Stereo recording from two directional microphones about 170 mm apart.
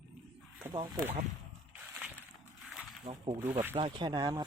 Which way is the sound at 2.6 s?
Centre (ahead or behind).